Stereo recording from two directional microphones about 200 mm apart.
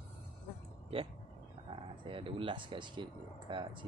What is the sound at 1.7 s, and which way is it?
Speech, 25° right (ahead or behind).